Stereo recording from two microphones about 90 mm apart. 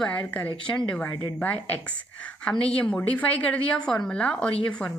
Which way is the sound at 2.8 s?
15° left (ahead or behind).